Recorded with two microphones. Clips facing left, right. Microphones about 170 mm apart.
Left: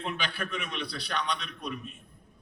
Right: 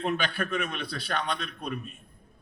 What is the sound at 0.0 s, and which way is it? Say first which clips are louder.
A man's voice: right 5 dB; 50° right (ahead or behind).